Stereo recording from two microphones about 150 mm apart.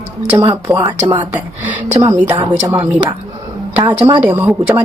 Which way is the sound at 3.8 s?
25° right (ahead or behind).